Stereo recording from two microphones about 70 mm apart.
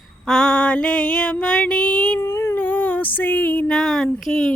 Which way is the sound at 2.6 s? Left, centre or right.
Left.